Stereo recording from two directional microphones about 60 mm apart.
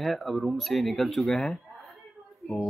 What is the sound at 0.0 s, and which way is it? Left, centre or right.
A woman's voice, centre.